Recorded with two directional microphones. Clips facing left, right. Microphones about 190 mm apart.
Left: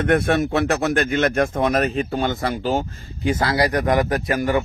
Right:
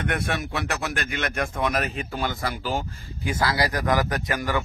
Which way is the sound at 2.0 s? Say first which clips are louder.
Left 7 dB; 35° left (ahead or behind).